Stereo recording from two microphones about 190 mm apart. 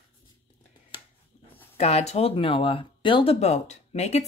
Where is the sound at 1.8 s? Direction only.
35° left (ahead or behind).